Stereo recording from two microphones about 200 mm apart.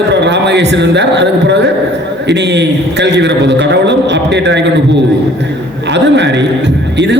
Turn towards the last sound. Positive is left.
turn(degrees=-60)  # may be behind; listen again after turning